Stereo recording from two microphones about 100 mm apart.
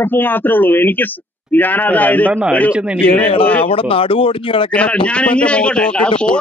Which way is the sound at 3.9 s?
65° left (ahead or behind).